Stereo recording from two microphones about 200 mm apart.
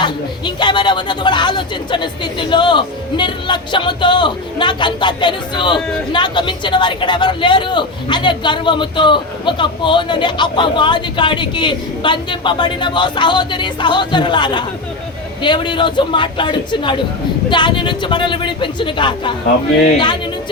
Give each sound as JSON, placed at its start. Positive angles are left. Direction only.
{"t": 0.0, "sound": "speech", "side_deg": 20}